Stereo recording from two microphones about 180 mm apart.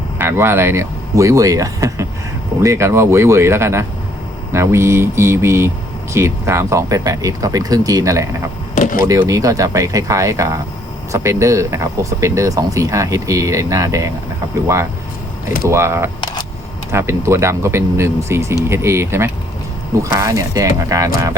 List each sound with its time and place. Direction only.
0.2 s speech: 15° right (ahead or behind)
8.7 s a sound: 45° left (ahead or behind)
9.0 s speech: 20° right (ahead or behind)
15.6 s speech: 15° right (ahead or behind)
16.2 s camera: 25° left (ahead or behind)
16.9 s speech: 15° right (ahead or behind)